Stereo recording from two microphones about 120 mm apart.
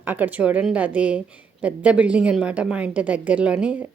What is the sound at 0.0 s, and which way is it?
A woman's voice, 15° right (ahead or behind).